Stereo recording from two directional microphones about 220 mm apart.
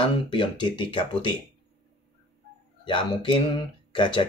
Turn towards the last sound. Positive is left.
turn(degrees=20)  # may be behind; listen again after turning